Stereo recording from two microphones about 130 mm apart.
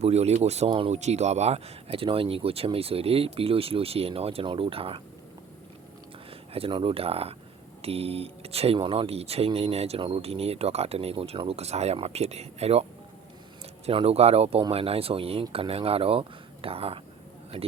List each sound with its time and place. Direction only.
0.0 s speech: 55° right (ahead or behind)
0.9 s speech: 60° right (ahead or behind); by 5.0 s 45° right (ahead or behind)
6.5 s speech: 45° right (ahead or behind)
13.8 s speech: 50° right (ahead or behind)